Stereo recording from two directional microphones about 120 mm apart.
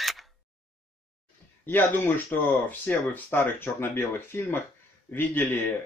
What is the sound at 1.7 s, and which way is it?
Speech, 15° left (ahead or behind).